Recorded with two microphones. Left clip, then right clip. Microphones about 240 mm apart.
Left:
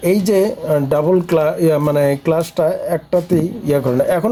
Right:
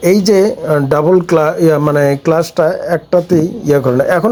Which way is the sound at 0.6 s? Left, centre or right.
Centre.